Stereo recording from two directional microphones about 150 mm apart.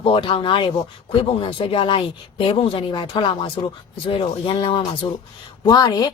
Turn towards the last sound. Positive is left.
turn(degrees=25)  # may be behind; listen again after turning